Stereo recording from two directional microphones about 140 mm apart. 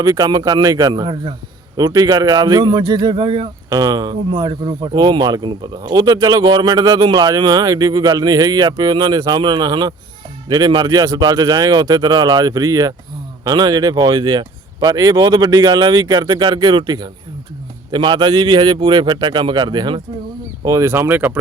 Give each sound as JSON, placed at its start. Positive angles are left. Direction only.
{"t": 0.0, "sound": "a man's voice", "side_deg": -25}
{"t": 20.7, "sound": "speech", "side_deg": -20}